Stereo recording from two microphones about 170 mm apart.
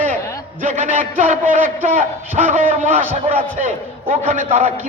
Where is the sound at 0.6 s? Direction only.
45° right (ahead or behind).